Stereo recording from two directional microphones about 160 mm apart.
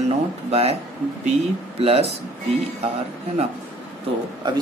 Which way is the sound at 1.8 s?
35° right (ahead or behind).